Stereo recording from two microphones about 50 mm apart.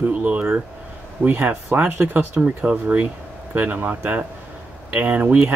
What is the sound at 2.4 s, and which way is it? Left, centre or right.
Speech, right.